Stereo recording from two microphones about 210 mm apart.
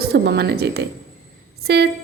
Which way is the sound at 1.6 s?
50° right (ahead or behind).